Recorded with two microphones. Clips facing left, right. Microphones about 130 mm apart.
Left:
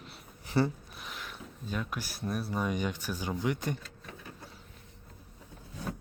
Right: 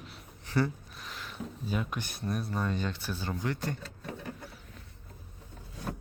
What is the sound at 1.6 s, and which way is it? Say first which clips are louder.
Speech: right 1 dB; 5° right (ahead or behind).